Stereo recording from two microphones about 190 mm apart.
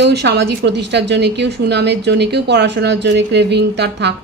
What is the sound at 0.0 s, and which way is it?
A woman's voice, 60° right (ahead or behind).